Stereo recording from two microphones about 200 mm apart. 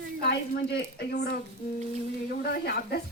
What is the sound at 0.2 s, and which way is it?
A woman's voice, 55° left (ahead or behind).